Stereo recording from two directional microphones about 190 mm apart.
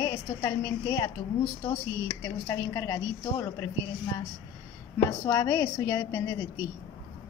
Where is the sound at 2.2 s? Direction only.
15° left (ahead or behind).